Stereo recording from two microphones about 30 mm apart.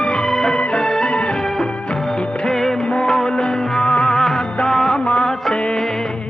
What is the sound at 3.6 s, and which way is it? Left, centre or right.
Music, centre.